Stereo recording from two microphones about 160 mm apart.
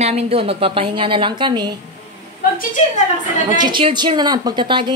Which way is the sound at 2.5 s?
50° left (ahead or behind).